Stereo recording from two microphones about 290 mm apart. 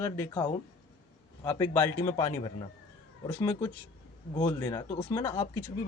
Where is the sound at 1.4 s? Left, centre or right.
Centre.